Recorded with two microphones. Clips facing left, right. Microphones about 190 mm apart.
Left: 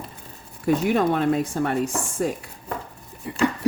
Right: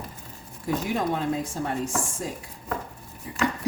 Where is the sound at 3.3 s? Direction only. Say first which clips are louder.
Left 5 dB; 65° left (ahead or behind).